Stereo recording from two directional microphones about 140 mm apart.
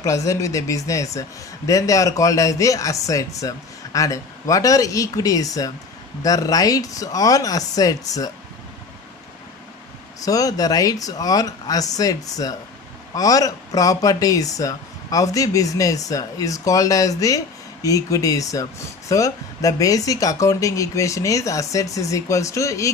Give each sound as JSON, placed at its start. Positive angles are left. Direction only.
{"t": 0.0, "sound": "speech", "side_deg": 25}
{"t": 10.2, "sound": "speech", "side_deg": 25}